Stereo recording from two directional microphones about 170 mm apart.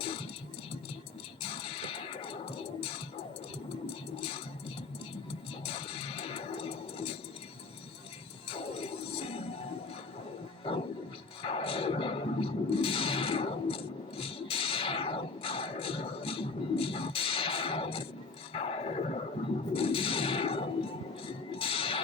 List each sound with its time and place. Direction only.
0.0 s music: 35° left (ahead or behind)
1.4 s music: 35° left (ahead or behind)
3.8 s a sound: 35° left (ahead or behind)
5.6 s music: 35° left (ahead or behind)
8.4 s music: 35° left (ahead or behind)
10.7 s music: 35° left (ahead or behind)
11.4 s a sound: 35° left (ahead or behind)
19.7 s whip: 35° left (ahead or behind)
21.2 s music: 35° left (ahead or behind)